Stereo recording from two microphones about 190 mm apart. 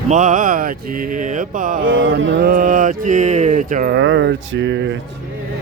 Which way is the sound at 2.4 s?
45° right (ahead or behind).